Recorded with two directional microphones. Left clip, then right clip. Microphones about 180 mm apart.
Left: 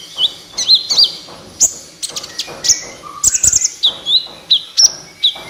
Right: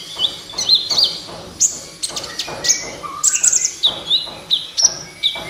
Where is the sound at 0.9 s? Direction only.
35° left (ahead or behind).